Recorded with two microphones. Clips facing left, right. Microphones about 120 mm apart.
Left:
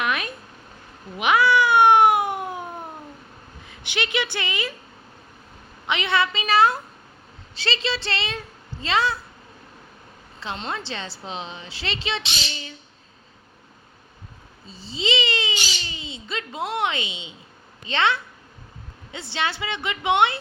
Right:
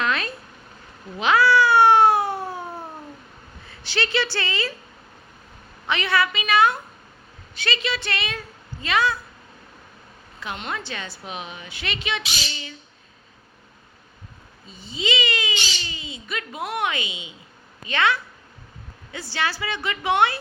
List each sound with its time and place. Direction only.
0.0 s a sound: 15° left (ahead or behind)
1.1 s cat: 15° left (ahead or behind)
3.7 s a woman's voice: 15° left (ahead or behind)
5.8 s a woman's voice: 20° left (ahead or behind)
10.4 s a woman's voice: 30° left (ahead or behind)
12.2 s a sound: centre (ahead or behind)
14.7 s a woman's voice: 30° left (ahead or behind)